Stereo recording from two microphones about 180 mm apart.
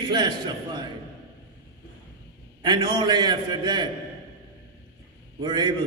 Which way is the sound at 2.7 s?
25° right (ahead or behind).